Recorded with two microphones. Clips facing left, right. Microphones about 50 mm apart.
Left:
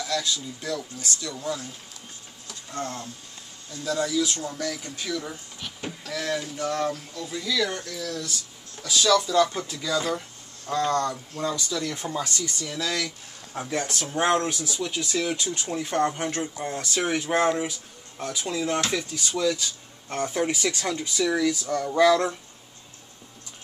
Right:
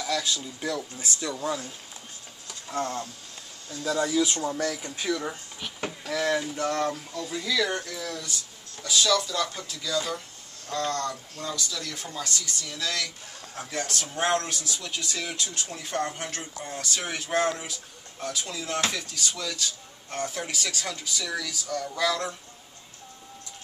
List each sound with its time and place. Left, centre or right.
0.0 s speech: centre
2.4 s a sound: centre
4.0 s speech: right
8.8 s speech: centre; by 12.3 s left
12.4 s speech: centre
20.2 s speech: centre